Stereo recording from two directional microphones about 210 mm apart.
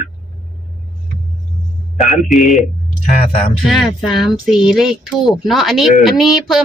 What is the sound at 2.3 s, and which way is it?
Speech, centre (ahead or behind).